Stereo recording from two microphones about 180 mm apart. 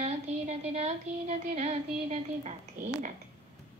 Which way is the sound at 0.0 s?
35° right (ahead or behind).